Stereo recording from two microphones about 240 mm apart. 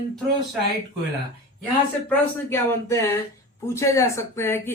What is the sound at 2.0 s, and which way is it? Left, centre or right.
Speech, centre.